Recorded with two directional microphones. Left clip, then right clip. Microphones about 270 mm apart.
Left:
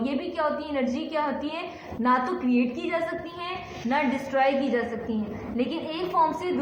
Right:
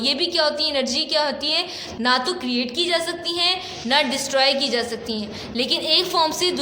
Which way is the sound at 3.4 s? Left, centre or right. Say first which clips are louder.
Right 10 dB; right.